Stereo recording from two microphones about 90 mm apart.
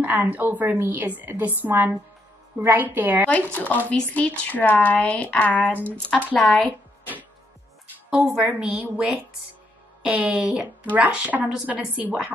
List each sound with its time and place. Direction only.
0.0 s a woman's voice: 20° right (ahead or behind)
3.3 s speech: 20° left (ahead or behind)
8.1 s speech: 15° right (ahead or behind)